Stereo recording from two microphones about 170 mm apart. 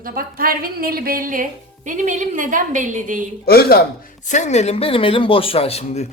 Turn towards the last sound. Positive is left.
turn(degrees=35)  # may be behind; listen again after turning